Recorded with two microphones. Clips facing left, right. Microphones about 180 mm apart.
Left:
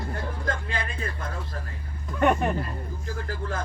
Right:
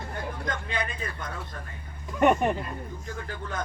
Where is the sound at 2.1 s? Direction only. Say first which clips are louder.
Right 1 dB; 10° right (ahead or behind).